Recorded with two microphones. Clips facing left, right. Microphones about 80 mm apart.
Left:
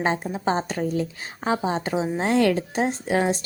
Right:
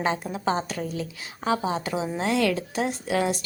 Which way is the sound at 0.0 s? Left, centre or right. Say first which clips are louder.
Left 2 dB; left.